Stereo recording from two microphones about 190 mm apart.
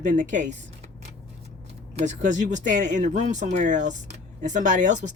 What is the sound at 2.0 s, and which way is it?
Speech, 40° right (ahead or behind).